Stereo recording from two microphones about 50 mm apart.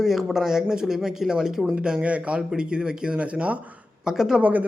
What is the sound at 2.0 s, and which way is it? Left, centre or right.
A man's voice, right.